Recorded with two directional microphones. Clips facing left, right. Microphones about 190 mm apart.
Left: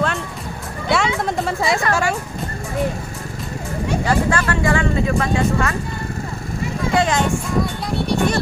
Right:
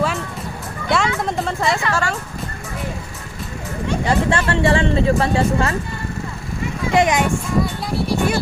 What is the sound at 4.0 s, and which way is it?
Speech, 25° right (ahead or behind).